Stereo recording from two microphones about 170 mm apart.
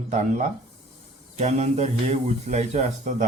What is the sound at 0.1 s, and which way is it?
Speech, 45° right (ahead or behind).